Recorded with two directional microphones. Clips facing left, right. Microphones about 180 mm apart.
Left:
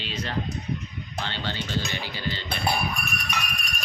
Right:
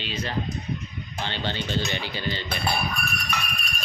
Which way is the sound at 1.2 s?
20° right (ahead or behind).